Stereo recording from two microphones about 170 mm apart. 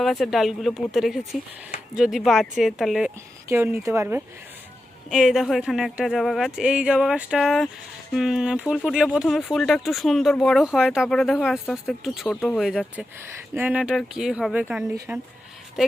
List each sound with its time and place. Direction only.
0.0 s speech: centre (ahead or behind)
3.5 s speech: 15° right (ahead or behind)
5.0 s speech: 5° right (ahead or behind)
13.5 s speech: 10° right (ahead or behind)
14.9 s speech: 15° right (ahead or behind)